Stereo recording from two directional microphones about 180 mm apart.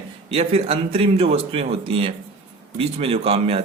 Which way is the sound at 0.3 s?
35° right (ahead or behind).